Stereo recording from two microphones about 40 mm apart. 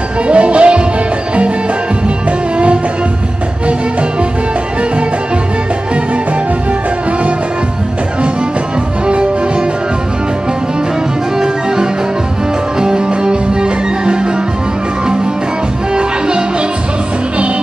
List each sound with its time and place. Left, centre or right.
0.3 s music: right
2.5 s music: right
9.0 s music: right
11.3 s music: centre
15.9 s music: right